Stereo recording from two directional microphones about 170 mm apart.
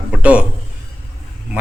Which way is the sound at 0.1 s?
5° right (ahead or behind).